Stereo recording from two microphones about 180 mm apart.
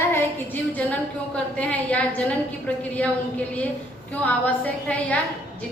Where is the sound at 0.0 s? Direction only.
10° left (ahead or behind).